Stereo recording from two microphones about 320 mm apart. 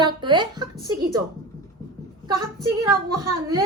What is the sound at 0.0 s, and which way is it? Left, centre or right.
A woman's voice, centre.